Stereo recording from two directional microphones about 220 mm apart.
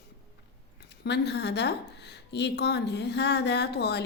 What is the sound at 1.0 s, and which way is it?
A woman's voice, 50° left (ahead or behind).